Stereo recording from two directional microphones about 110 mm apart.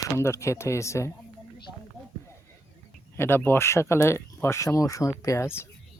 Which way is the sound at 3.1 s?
20° left (ahead or behind).